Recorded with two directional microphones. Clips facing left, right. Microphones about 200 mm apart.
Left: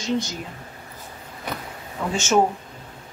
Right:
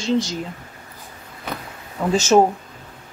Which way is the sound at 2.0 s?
35° right (ahead or behind).